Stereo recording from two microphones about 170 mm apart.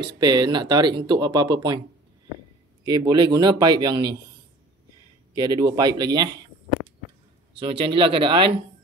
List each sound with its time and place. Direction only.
0.2 s speech: 25° right (ahead or behind)
2.8 s speech: 25° right (ahead or behind)
5.3 s speech: 25° right (ahead or behind)
7.5 s speech: 30° right (ahead or behind)